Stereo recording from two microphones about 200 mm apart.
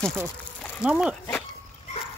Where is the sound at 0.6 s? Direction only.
Centre (ahead or behind).